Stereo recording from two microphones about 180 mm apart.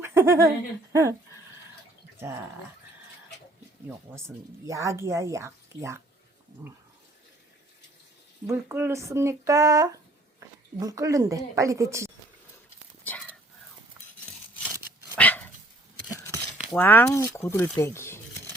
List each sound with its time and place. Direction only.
0.0 s a sound: 15° right (ahead or behind)
2.1 s speech: 15° right (ahead or behind)
4.6 s speech: 15° right (ahead or behind)
8.4 s speech: 15° right (ahead or behind)
13.1 s whispering: 10° left (ahead or behind)
14.0 s a sound: 10° right (ahead or behind)
15.1 s dog: 10° left (ahead or behind)
16.7 s speech: 10° left (ahead or behind)